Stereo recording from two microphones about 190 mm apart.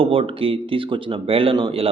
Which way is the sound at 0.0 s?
30° right (ahead or behind).